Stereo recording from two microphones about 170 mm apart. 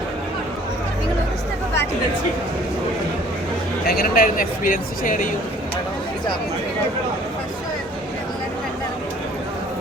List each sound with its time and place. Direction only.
3.8 s speech: 60° left (ahead or behind)